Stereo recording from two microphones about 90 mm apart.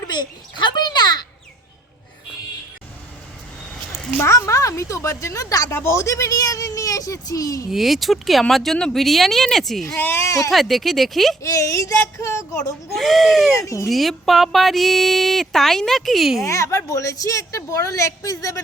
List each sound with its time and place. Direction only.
0.1 s a sound: 55° left (ahead or behind)
4.2 s a woman's voice: 30° left (ahead or behind)
7.7 s speech: centre (ahead or behind)
10.0 s a woman's voice: 30° left (ahead or behind)
10.5 s speech: centre (ahead or behind)
11.4 s a woman's voice: 35° left (ahead or behind)
12.9 s speech: centre (ahead or behind)
16.4 s a woman's voice: 35° left (ahead or behind)